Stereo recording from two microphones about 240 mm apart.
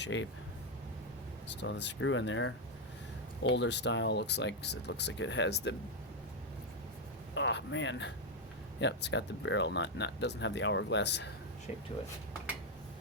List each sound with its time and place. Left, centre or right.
0.0 s speech: left
1.5 s speech: left
7.3 s speech: left